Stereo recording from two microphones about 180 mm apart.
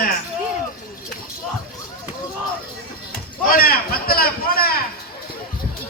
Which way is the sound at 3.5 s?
55° left (ahead or behind).